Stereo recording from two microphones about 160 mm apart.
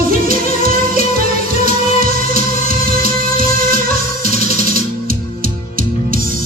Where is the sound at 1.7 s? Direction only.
60° right (ahead or behind).